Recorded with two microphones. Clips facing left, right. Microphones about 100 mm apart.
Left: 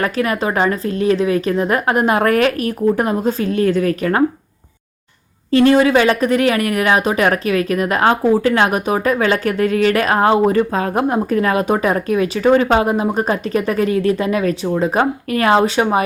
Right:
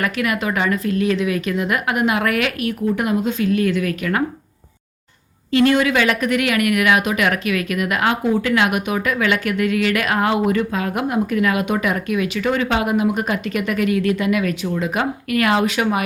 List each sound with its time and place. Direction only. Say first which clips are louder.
0.0 s speech: left 3 dB; 35° left (ahead or behind)
5.5 s speech: left 4 dB; 35° left (ahead or behind)